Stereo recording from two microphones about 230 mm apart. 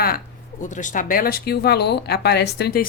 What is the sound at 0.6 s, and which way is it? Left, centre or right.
Speech, left.